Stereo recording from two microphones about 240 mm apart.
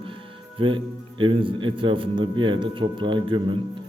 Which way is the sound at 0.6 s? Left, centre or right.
Right.